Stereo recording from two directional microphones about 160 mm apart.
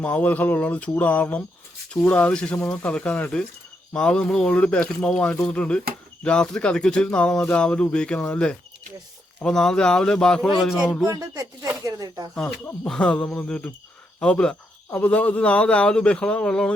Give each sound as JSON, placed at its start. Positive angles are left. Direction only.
{"t": 0.0, "sound": "a man's voice", "side_deg": 10}
{"t": 11.0, "sound": "speech", "side_deg": -20}
{"t": 12.6, "sound": "a man's voice", "side_deg": 5}